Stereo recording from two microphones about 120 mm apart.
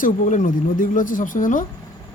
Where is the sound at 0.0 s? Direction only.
90° left.